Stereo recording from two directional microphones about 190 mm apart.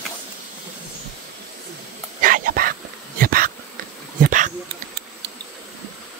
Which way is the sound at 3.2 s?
50° right (ahead or behind).